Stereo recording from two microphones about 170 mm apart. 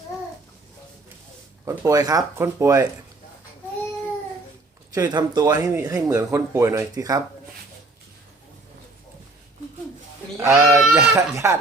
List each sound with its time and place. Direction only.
1.6 s speech: 15° right (ahead or behind)
4.9 s speech: 25° right (ahead or behind)
10.3 s speech: 15° right (ahead or behind)
10.8 s speech: 5° right (ahead or behind)
11.1 s speech: 15° right (ahead or behind)